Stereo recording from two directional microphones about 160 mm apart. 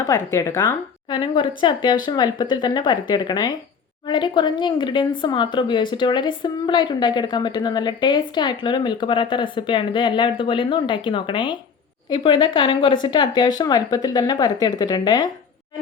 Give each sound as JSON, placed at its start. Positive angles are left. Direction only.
{"t": 0.0, "sound": "a woman's voice", "side_deg": 20}
{"t": 1.1, "sound": "a woman's voice", "side_deg": 30}